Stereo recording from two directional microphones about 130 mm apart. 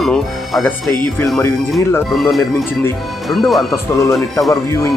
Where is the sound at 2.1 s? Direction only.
Centre (ahead or behind).